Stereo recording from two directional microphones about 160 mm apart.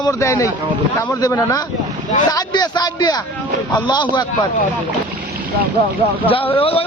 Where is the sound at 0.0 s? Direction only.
20° left (ahead or behind).